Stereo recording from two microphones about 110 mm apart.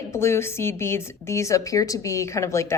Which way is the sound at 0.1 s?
25° left (ahead or behind).